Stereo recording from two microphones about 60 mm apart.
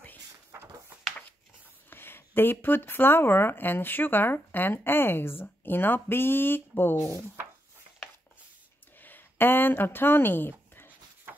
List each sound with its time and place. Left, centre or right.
0.5 s a sound: right
1.9 s speech: left
7.0 s speech: left
8.9 s speech: left